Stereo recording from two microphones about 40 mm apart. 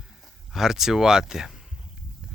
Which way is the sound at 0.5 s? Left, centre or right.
Centre.